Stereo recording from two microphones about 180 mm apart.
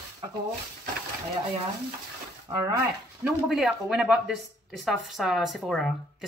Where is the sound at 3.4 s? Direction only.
Centre (ahead or behind).